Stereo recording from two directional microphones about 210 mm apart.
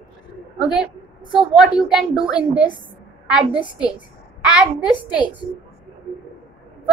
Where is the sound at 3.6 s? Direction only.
20° left (ahead or behind).